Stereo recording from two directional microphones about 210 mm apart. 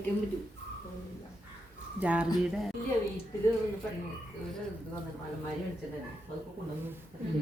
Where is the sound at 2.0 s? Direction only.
5° right (ahead or behind).